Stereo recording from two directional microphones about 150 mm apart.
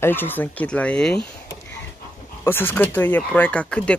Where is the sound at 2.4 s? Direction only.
15° left (ahead or behind).